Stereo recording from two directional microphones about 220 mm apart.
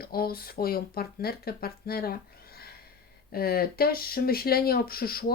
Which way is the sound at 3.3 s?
45° left (ahead or behind).